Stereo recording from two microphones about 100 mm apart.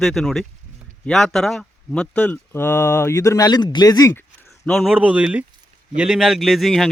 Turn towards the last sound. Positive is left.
turn(degrees=0)  # may be behind; listen again after turning